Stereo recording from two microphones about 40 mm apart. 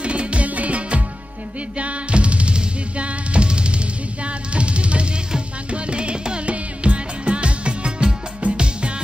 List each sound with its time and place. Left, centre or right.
0.0 s music: right